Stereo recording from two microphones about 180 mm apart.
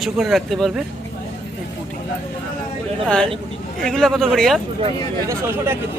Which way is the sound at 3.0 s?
5° left (ahead or behind).